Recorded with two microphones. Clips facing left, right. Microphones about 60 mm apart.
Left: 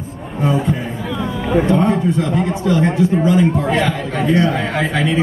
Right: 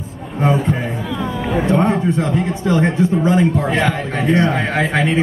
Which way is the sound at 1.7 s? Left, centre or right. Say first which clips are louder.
Left 1 dB; right.